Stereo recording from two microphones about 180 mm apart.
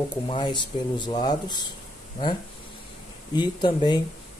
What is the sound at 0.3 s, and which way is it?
Speech, 25° left (ahead or behind).